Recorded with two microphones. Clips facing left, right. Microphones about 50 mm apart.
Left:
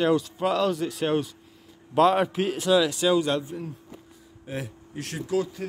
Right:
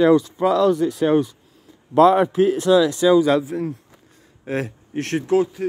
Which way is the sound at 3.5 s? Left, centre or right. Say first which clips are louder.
Right 10 dB; right.